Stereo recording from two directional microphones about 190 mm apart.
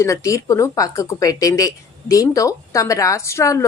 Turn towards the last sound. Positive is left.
turn(degrees=15)  # may be behind; listen again after turning